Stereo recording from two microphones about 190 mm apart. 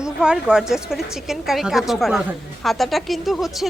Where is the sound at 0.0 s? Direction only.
5° right (ahead or behind).